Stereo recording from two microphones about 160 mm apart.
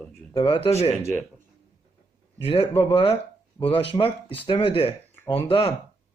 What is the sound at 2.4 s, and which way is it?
Speech, 35° left (ahead or behind).